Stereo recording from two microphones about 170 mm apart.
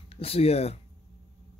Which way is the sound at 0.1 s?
35° left (ahead or behind).